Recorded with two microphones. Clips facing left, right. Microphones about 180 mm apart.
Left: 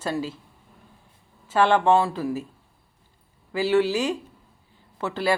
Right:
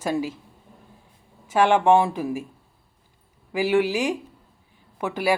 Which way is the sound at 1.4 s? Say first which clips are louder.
Right 1 dB; 10° right (ahead or behind).